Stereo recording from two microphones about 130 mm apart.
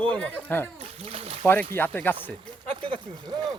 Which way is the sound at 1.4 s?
15° left (ahead or behind).